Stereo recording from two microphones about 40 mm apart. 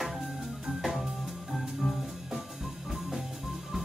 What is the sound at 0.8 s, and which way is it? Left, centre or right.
Music, centre.